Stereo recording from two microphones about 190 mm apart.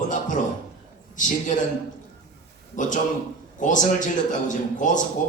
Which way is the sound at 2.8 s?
40° left (ahead or behind).